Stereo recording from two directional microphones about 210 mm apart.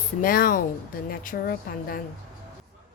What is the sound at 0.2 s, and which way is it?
A woman's voice, 45° left (ahead or behind).